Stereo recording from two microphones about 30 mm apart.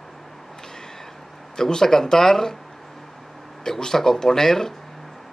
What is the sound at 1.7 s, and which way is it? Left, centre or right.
Speech, centre.